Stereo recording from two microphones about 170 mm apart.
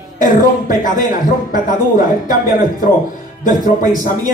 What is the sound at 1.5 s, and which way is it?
Speech, 50° left (ahead or behind).